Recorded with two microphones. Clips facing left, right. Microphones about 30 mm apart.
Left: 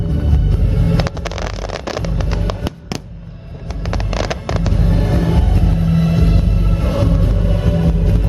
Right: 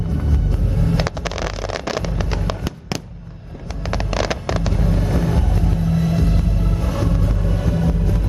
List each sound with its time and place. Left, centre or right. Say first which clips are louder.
0.3 s music: left 3 dB; left
0.9 s music: left 2 dB; centre
3.8 s vehicle: even; centre
4.7 s music: left 3 dB; left
7.2 s a sound: left 3 dB; left
8.0 s vehicle: left 3 dB; left